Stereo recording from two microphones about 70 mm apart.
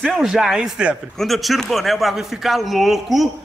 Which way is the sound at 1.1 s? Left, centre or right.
Centre.